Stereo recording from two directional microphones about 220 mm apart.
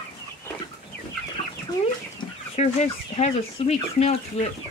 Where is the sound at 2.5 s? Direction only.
30° left (ahead or behind).